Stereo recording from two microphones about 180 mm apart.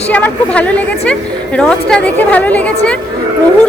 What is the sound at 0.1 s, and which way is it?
A woman's voice, 10° left (ahead or behind).